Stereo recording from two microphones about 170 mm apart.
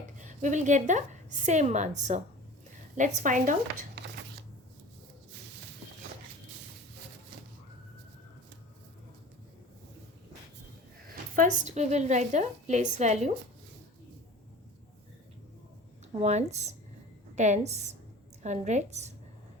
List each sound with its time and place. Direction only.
0.2 s a woman's voice: 45° right (ahead or behind)
11.3 s a woman's voice: 45° right (ahead or behind)
16.2 s a woman's voice: 40° right (ahead or behind)